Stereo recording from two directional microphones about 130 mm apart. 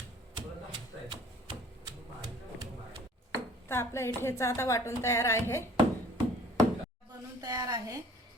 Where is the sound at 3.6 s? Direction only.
20° left (ahead or behind).